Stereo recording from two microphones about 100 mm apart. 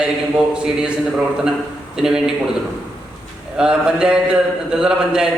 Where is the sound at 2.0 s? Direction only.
5° right (ahead or behind).